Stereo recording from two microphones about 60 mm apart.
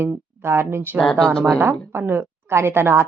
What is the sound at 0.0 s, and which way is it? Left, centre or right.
A woman's voice, right.